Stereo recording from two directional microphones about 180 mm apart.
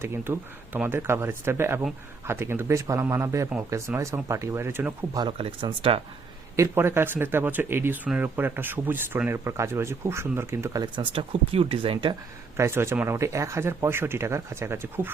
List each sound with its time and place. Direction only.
0.0 s speech: 10° right (ahead or behind)
5.2 s speech: 30° right (ahead or behind)
6.6 s speech: 15° right (ahead or behind)
12.5 s speech: 15° right (ahead or behind)